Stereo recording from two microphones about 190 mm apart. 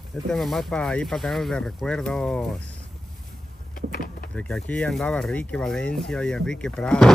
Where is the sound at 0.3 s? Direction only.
Centre (ahead or behind).